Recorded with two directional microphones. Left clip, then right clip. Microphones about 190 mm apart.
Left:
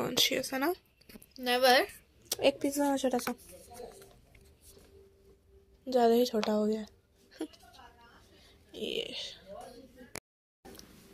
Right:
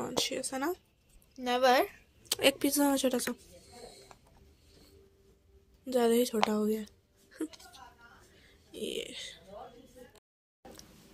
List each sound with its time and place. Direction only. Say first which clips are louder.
0.0 s speech: left 4 dB; centre (ahead or behind)
1.4 s a woman's voice: left 1 dB; 35° right (ahead or behind)
2.2 s a woman's voice: right 1 dB; 15° right (ahead or behind)
5.9 s a woman's voice: left 2 dB; 15° right (ahead or behind)
8.7 s speech: left 2 dB; 5° right (ahead or behind)